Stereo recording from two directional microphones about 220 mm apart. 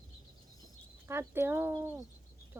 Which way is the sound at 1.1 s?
10° right (ahead or behind).